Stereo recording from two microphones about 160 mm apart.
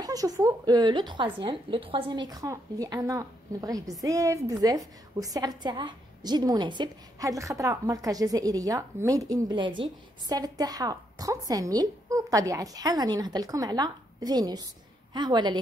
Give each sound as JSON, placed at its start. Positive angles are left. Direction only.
{"t": 0.0, "sound": "a woman's voice", "side_deg": -20}